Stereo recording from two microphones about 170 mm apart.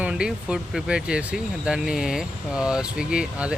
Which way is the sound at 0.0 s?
5° right (ahead or behind).